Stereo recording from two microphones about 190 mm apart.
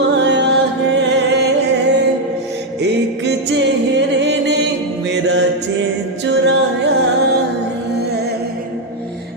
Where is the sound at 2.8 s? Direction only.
65° right (ahead or behind).